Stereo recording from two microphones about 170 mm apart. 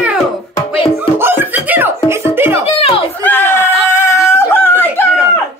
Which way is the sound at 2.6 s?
35° left (ahead or behind).